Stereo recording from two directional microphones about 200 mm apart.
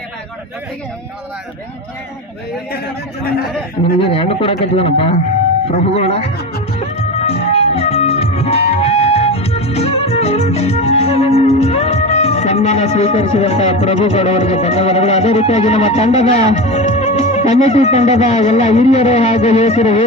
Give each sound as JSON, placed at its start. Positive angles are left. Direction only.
{"t": 4.0, "sound": "a man's voice", "side_deg": 30}
{"t": 6.7, "sound": "music", "side_deg": 30}